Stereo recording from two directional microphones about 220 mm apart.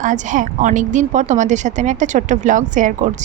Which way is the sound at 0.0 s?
35° right (ahead or behind).